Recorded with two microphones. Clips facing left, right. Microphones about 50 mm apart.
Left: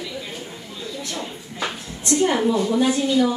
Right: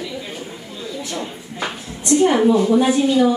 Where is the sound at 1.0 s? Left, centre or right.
Centre.